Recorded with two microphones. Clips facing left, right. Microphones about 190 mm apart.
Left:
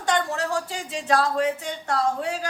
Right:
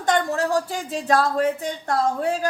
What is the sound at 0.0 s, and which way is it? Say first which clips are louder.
Speech: right 3 dB; 45° right (ahead or behind).